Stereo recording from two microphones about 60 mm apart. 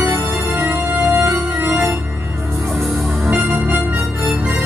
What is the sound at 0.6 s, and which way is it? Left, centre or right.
Organ, right.